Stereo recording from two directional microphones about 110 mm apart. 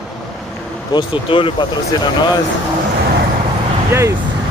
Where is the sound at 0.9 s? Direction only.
50° left (ahead or behind).